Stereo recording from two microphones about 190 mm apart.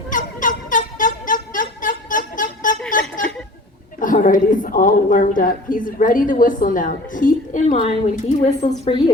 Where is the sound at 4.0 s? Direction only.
45° left (ahead or behind).